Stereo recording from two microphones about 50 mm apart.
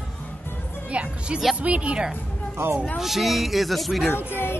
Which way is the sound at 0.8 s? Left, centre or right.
Right.